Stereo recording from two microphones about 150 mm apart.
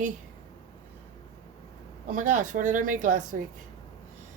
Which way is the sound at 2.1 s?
55° right (ahead or behind).